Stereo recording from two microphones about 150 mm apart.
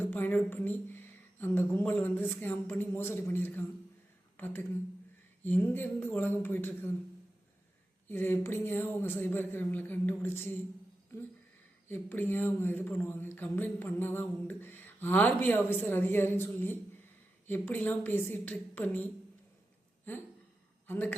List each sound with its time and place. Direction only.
0.0 s speech: 15° left (ahead or behind)
8.0 s speech: 15° left (ahead or behind)
20.1 s speech: 10° left (ahead or behind)